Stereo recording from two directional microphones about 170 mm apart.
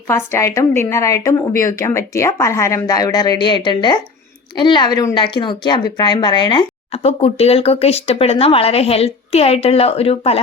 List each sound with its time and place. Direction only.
0.1 s a woman's voice: 15° left (ahead or behind); by 10.4 s 35° left (ahead or behind)